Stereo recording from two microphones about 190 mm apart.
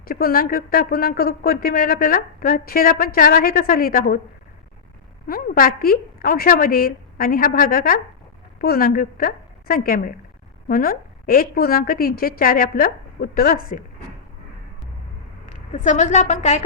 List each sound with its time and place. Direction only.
0.0 s speech: 50° left (ahead or behind)
5.3 s speech: 50° left (ahead or behind)
15.7 s a woman's voice: 40° left (ahead or behind)